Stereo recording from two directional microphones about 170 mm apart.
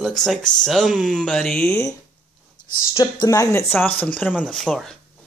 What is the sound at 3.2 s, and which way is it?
Speech, 20° left (ahead or behind).